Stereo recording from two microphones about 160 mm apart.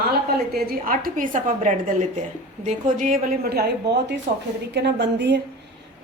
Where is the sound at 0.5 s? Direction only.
65° right (ahead or behind).